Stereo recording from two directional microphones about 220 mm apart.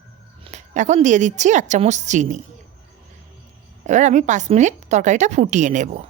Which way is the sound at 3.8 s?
35° right (ahead or behind).